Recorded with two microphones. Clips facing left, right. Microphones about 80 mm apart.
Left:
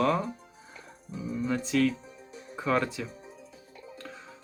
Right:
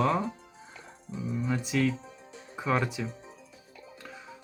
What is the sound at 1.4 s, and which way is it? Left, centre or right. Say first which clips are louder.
Speech: left 2 dB; centre.